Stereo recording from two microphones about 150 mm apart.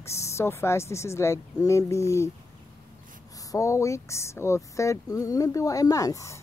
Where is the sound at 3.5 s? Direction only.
20° left (ahead or behind).